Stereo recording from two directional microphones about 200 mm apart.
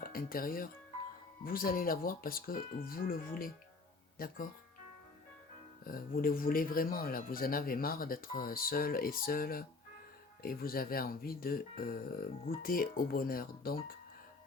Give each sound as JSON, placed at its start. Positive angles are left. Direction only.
{"t": 0.0, "sound": "speech", "side_deg": 45}
{"t": 5.8, "sound": "speech", "side_deg": 45}